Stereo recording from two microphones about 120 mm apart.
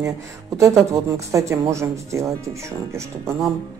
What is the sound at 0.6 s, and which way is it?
Speech, 25° right (ahead or behind).